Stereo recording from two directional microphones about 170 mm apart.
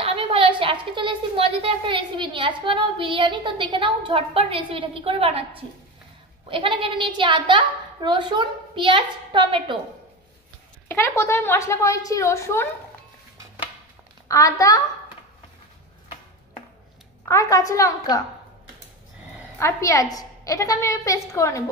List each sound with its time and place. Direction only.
0.0 s a sound: 35° right (ahead or behind)
6.5 s a woman's voice: 30° right (ahead or behind)
10.9 s a woman's voice: 15° left (ahead or behind)
14.2 s a woman's voice: 20° left (ahead or behind)
17.3 s a woman's voice: 20° left (ahead or behind)
19.6 s a woman's voice: 20° left (ahead or behind)